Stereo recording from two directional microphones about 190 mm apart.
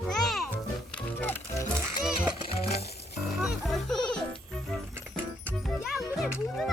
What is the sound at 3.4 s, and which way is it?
Speech, centre (ahead or behind).